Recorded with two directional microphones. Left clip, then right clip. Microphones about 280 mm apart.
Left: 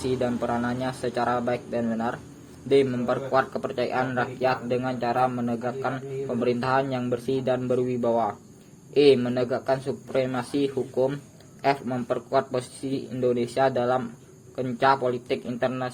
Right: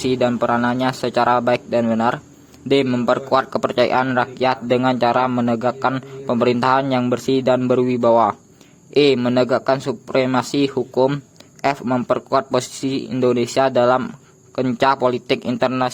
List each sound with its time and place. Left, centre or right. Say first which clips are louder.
0.2 s speech: right 9 dB; right